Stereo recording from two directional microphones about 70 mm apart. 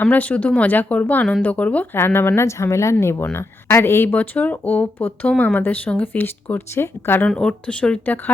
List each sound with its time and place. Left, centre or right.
0.0 s speech: left
4.1 s speech: left
7.3 s speech: centre